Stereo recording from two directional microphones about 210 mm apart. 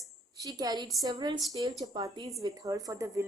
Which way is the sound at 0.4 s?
15° right (ahead or behind).